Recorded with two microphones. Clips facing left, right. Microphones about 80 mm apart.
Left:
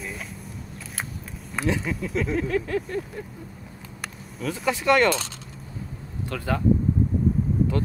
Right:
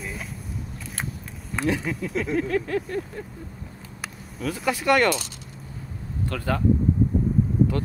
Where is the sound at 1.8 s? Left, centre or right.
Centre.